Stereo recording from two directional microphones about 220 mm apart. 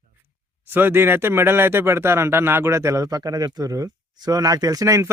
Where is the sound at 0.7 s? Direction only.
10° right (ahead or behind).